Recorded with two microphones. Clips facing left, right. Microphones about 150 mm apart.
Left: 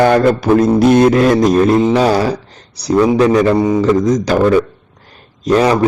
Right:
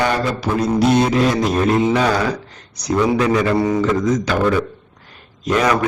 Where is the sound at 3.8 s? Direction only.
35° left (ahead or behind).